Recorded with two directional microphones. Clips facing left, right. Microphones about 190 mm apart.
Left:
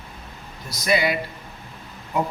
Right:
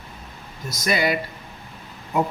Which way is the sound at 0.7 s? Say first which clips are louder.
Left 1 dB; 45° right (ahead or behind).